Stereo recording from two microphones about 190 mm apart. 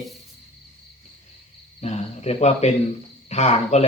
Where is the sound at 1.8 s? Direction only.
35° left (ahead or behind).